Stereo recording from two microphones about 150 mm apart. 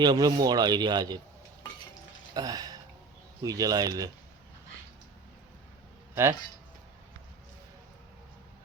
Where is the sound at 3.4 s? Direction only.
25° right (ahead or behind).